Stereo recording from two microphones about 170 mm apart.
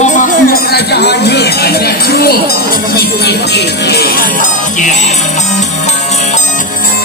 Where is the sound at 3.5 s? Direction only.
70° left (ahead or behind).